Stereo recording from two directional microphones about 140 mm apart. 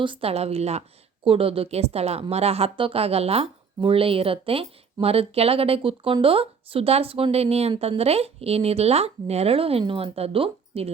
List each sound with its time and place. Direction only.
0.0 s speech: 40° right (ahead or behind)